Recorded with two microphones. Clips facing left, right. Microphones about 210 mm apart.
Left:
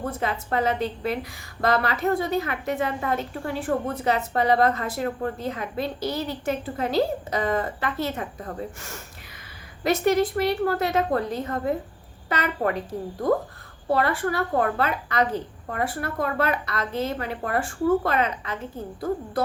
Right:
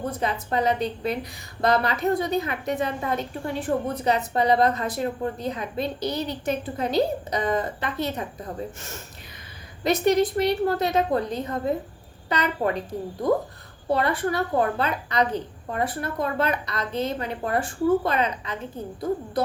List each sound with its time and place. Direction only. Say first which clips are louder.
0.0 s a woman's voice: right 1 dB; 20° right (ahead or behind)
13.9 s a woman's voice: even; 20° right (ahead or behind)